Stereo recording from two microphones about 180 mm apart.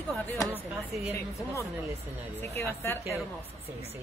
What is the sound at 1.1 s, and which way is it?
A woman's voice, 15° left (ahead or behind).